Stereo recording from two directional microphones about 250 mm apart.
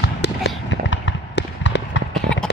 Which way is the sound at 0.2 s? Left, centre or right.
Left.